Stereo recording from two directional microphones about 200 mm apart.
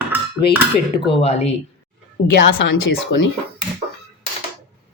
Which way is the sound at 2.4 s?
65° left (ahead or behind).